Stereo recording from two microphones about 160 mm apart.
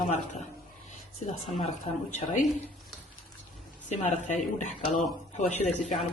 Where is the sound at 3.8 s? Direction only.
50° left (ahead or behind).